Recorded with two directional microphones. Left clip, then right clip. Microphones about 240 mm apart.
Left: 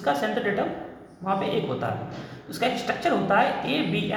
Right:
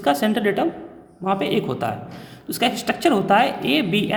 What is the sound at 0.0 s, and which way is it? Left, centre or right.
A woman's voice, right.